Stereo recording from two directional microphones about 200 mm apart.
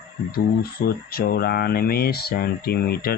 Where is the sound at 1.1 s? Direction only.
50° left (ahead or behind).